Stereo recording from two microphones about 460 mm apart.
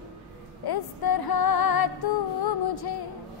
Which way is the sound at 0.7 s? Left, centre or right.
Left.